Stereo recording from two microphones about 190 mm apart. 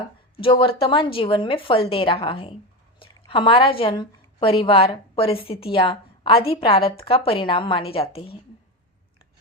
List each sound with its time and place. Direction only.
0.3 s a woman's voice: 25° left (ahead or behind)